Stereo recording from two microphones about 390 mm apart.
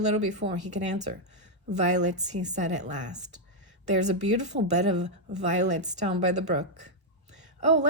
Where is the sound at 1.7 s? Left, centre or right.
Centre.